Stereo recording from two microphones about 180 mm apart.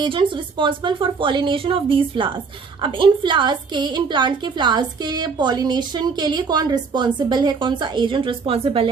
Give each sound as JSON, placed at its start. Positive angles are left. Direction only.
{"t": 0.0, "sound": "a woman's voice", "side_deg": -25}